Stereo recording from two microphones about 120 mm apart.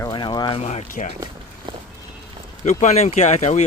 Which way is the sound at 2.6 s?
75° left (ahead or behind).